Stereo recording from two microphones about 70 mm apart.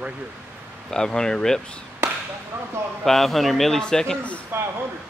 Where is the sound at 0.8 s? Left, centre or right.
Centre.